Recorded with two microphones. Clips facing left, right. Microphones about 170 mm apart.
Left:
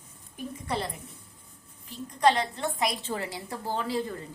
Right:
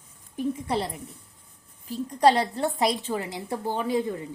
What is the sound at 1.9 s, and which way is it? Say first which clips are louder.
A woman's voice: right 4 dB; 40° right (ahead or behind).